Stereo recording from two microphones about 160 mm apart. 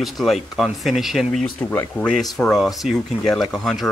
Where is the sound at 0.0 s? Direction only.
Centre (ahead or behind).